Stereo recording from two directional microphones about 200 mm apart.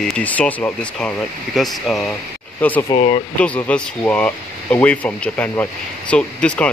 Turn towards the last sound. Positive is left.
turn(degrees=5)  # may be behind; listen again after turning